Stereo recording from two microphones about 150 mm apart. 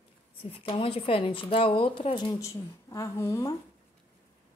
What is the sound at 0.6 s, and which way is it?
Speech, 40° left (ahead or behind).